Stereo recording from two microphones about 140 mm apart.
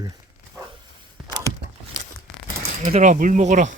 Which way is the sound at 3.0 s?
70° right (ahead or behind).